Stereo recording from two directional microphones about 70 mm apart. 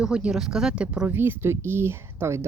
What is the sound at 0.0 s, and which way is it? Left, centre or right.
Speech, centre.